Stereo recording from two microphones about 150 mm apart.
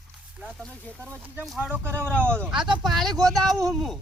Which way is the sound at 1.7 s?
15° right (ahead or behind).